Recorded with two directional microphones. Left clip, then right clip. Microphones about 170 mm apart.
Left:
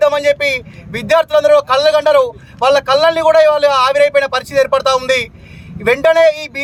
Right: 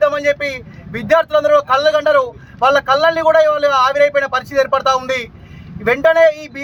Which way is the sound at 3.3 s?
25° left (ahead or behind).